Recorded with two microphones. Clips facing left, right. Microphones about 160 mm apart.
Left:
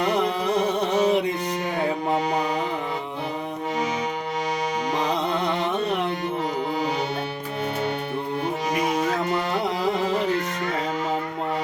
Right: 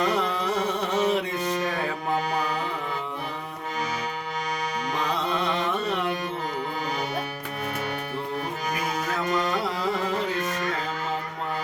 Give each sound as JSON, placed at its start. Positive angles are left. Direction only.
{"t": 0.0, "sound": "music", "side_deg": 20}
{"t": 4.9, "sound": "music", "side_deg": 20}
{"t": 8.7, "sound": "music", "side_deg": 25}